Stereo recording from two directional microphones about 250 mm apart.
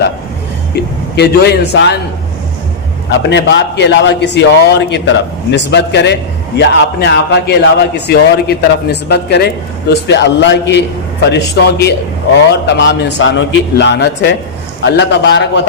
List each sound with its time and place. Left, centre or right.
1.1 s a man's voice: left
3.1 s a man's voice: left